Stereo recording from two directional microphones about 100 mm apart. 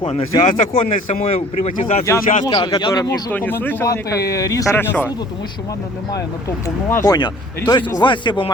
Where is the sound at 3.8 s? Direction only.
35° left (ahead or behind).